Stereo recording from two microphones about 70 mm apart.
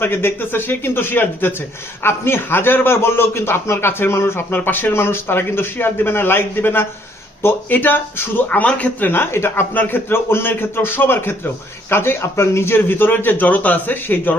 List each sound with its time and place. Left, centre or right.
0.0 s a man's voice: left
8.4 s a man's voice: left